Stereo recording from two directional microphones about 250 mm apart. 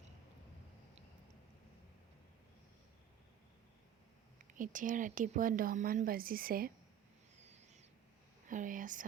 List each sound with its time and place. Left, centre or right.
4.5 s a woman's voice: right
7.4 s owl: right
8.4 s a sound: right